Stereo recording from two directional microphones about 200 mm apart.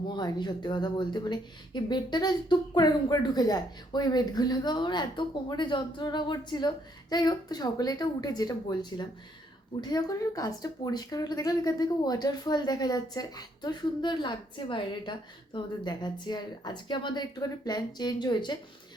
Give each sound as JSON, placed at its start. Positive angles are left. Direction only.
{"t": 0.1, "sound": "a woman's voice", "side_deg": 20}